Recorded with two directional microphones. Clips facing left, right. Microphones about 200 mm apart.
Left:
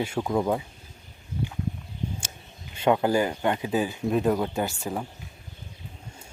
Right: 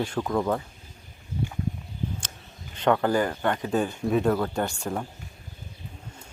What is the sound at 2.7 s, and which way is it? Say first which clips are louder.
Speech: left 1 dB; 10° left (ahead or behind).